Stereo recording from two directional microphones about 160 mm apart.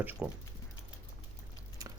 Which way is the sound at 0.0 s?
10° right (ahead or behind).